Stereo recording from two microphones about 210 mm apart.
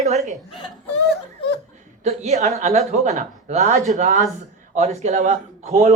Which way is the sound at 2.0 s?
30° right (ahead or behind).